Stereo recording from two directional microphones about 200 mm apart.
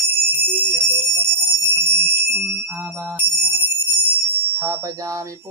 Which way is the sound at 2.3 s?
15° right (ahead or behind).